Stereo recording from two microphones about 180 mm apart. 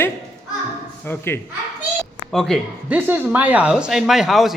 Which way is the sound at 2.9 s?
10° right (ahead or behind).